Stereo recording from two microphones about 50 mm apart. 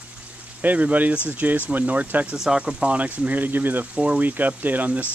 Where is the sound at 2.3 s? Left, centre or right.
Centre; by 3.8 s right.